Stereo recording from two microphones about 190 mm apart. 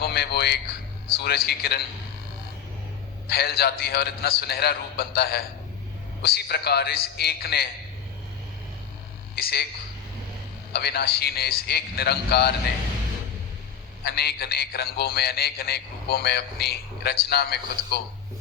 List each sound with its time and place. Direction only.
0.0 s a man's voice: 60° left (ahead or behind)
3.2 s a man's voice: 55° left (ahead or behind)
9.3 s a man's voice: 55° left (ahead or behind)
10.7 s a man's voice: 60° left (ahead or behind)
14.0 s a man's voice: 55° left (ahead or behind)